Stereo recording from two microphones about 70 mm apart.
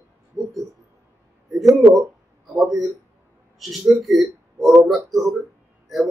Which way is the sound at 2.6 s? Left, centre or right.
Centre.